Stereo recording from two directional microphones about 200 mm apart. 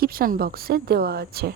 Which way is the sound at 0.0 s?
50° right (ahead or behind).